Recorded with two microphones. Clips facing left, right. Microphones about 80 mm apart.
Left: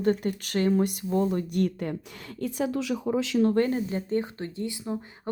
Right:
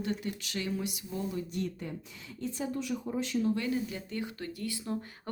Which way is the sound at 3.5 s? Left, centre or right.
Left.